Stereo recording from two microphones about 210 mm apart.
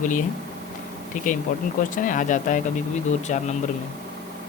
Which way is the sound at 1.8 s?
40° left (ahead or behind).